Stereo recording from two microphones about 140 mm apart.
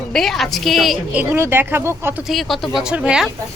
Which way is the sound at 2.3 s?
Centre (ahead or behind).